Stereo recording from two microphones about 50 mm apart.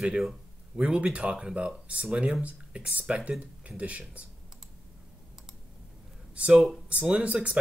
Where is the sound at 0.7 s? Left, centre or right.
Centre.